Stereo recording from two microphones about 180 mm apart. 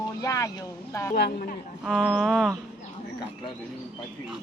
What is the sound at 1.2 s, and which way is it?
Speech, 60° left (ahead or behind).